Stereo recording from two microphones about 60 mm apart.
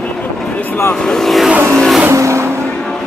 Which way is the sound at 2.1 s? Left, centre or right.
Right.